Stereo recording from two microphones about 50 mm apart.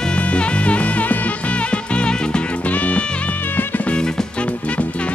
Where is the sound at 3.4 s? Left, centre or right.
Left.